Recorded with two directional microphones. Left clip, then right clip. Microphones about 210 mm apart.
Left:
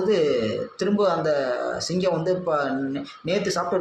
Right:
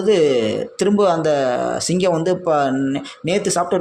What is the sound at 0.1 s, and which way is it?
A man's voice, 45° right (ahead or behind).